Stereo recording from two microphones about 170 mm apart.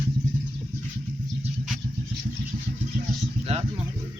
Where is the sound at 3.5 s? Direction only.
40° right (ahead or behind).